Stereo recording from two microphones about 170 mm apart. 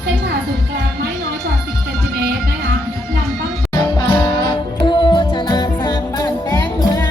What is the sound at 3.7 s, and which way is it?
Music, 25° left (ahead or behind).